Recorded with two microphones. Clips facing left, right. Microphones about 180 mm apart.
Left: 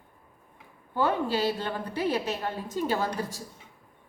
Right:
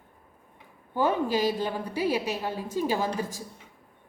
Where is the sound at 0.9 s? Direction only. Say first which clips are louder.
Right 1 dB; 15° right (ahead or behind).